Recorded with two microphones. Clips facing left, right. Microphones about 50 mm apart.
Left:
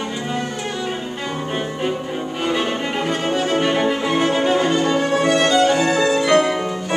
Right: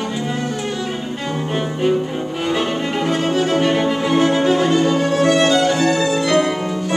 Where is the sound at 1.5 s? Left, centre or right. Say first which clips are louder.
Right 6 dB; centre.